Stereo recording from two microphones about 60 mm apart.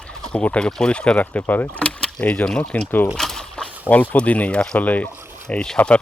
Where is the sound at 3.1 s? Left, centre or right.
Centre.